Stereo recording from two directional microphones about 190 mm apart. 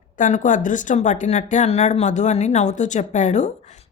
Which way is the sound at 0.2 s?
40° left (ahead or behind).